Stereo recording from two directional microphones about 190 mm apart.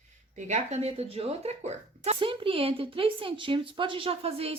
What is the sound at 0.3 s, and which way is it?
A woman's voice, 40° right (ahead or behind).